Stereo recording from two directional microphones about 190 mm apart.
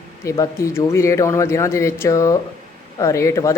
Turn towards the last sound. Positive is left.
turn(degrees=15)  # may be behind; listen again after turning